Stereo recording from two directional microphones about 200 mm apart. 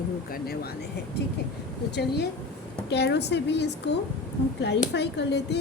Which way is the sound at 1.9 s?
55° left (ahead or behind).